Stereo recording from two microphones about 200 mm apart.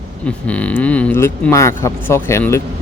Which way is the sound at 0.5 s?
5° left (ahead or behind).